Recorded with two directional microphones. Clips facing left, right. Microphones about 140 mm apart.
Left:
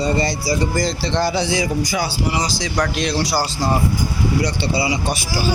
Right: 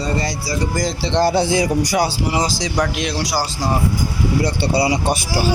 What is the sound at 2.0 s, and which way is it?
Speech, 30° right (ahead or behind).